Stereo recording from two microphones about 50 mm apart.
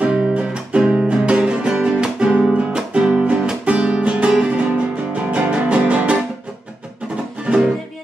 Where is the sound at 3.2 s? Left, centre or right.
Right.